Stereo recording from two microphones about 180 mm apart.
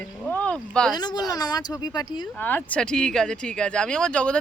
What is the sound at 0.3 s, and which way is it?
Boat, 5° left (ahead or behind).